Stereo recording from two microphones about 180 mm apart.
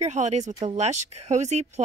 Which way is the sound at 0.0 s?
40° right (ahead or behind).